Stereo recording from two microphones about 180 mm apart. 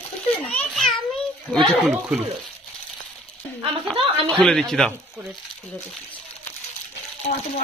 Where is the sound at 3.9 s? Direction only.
30° right (ahead or behind).